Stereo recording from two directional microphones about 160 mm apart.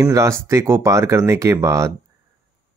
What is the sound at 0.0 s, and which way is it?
Speech, 20° right (ahead or behind).